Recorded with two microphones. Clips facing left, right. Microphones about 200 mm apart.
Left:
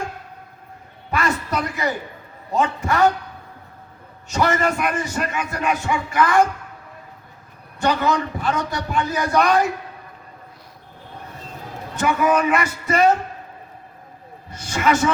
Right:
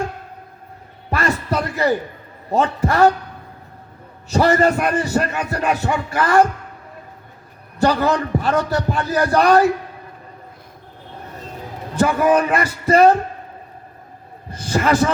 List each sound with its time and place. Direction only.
1.1 s a sound: 35° right (ahead or behind)
2.5 s a man's voice: 35° right (ahead or behind)
4.3 s a man's voice: 35° right (ahead or behind)
7.8 s a man's voice: 35° right (ahead or behind)
11.9 s a man's voice: 35° right (ahead or behind)
14.5 s a man's voice: 35° right (ahead or behind)